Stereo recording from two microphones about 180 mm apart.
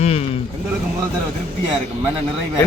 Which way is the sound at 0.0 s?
35° left (ahead or behind).